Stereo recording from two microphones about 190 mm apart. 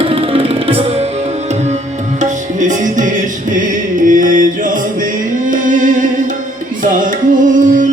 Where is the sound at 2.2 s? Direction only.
40° right (ahead or behind).